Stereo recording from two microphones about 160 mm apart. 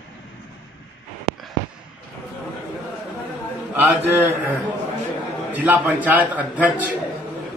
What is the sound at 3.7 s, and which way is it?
Speech, 10° right (ahead or behind).